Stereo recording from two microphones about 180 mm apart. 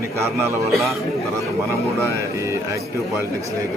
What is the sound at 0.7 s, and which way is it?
Speech, centre (ahead or behind).